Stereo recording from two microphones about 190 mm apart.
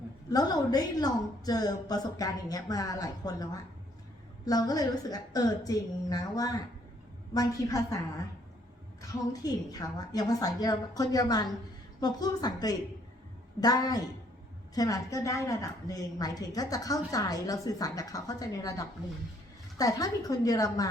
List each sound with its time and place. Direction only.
0.3 s a woman's voice: 20° left (ahead or behind)
9.0 s a woman's voice: 20° left (ahead or behind)